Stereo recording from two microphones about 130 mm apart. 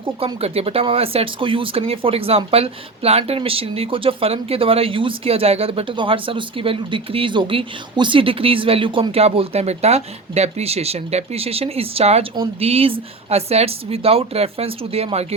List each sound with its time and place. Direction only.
0.0 s speech: 50° right (ahead or behind)